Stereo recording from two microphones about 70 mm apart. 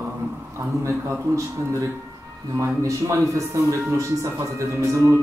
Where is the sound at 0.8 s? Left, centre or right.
Right.